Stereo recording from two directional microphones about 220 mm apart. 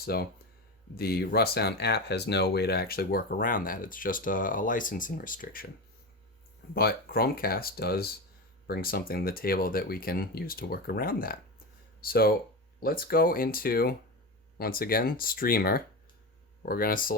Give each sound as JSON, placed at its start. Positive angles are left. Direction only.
{"t": 0.0, "sound": "speech", "side_deg": 45}
{"t": 6.7, "sound": "speech", "side_deg": 45}